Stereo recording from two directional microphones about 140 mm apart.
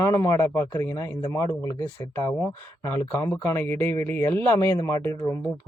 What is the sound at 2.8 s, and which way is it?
A man's voice, 20° left (ahead or behind).